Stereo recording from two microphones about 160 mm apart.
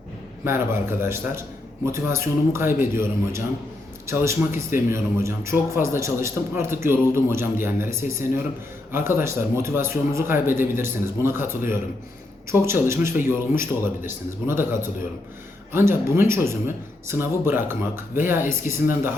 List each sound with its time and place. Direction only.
0.4 s speech: 15° right (ahead or behind)